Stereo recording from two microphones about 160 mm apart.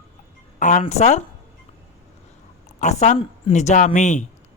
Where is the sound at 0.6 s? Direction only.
50° left (ahead or behind).